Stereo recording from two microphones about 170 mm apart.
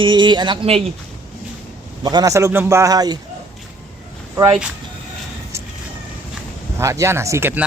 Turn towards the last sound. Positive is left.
turn(degrees=-15)  # may be behind; listen again after turning